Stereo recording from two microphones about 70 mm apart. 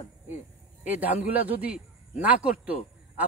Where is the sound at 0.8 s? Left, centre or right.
Right.